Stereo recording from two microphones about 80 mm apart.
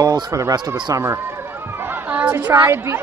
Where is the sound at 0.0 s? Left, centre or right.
Right.